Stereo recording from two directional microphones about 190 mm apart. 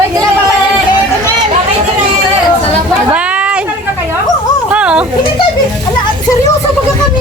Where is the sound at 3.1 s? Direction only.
5° right (ahead or behind).